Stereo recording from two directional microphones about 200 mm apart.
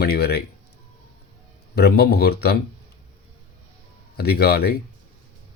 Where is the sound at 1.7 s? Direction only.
55° left (ahead or behind).